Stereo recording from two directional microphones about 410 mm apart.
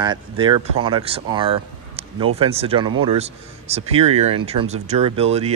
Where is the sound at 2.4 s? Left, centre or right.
Centre.